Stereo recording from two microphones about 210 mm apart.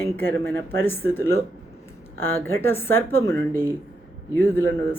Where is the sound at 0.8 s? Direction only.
10° left (ahead or behind).